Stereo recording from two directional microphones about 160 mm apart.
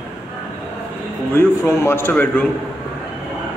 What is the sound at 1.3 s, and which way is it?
A man's voice, 15° left (ahead or behind).